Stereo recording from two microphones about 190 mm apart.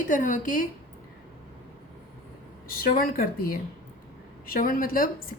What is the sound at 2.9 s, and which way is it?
A woman's voice, 45° left (ahead or behind).